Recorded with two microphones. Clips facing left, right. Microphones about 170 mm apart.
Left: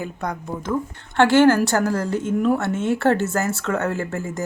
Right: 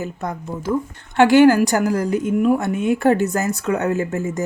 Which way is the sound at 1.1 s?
15° right (ahead or behind).